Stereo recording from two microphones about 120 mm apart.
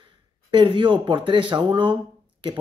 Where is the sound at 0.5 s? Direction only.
45° right (ahead or behind).